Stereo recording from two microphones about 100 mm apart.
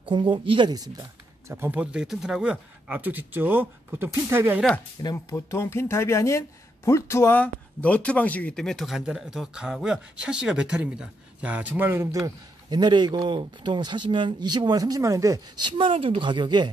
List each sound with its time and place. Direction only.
0.0 s speech: 60° right (ahead or behind)
0.7 s speech: 40° right (ahead or behind)
1.5 s speech: 20° right (ahead or behind)
5.1 s speech: 25° left (ahead or behind); by 12.1 s 20° right (ahead or behind)
12.6 s speech: 50° right (ahead or behind)